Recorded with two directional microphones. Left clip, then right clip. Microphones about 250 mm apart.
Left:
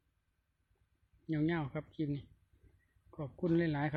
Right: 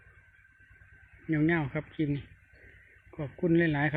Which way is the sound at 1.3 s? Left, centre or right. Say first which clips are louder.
Right 8 dB; centre.